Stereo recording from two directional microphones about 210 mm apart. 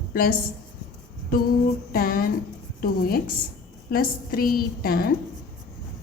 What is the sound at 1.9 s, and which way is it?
A woman's voice, 45° left (ahead or behind).